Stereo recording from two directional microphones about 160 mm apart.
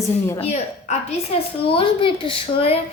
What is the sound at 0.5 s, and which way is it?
Speech, 45° left (ahead or behind).